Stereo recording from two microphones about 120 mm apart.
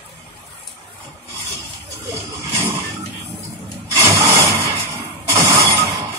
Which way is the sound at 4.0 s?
25° right (ahead or behind).